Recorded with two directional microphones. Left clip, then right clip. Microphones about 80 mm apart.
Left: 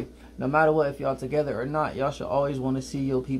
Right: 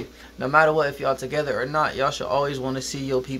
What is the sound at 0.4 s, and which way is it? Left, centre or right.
Speech, centre.